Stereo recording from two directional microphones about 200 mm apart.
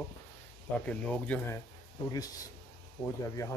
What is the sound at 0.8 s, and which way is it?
Speech, 5° left (ahead or behind).